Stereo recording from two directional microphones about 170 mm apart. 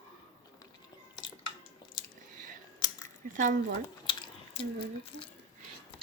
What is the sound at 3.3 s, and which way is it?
Speech, 50° right (ahead or behind).